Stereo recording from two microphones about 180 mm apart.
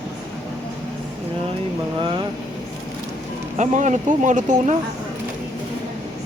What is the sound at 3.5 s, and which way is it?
Speech, 45° right (ahead or behind).